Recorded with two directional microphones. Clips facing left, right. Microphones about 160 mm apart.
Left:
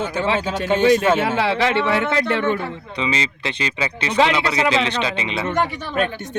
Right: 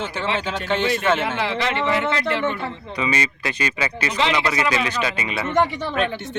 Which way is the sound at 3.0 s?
20° left (ahead or behind).